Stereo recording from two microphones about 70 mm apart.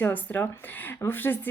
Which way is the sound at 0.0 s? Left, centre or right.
Left.